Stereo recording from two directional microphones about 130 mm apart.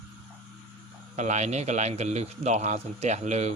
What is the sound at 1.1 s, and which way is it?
A man's voice, 65° right (ahead or behind).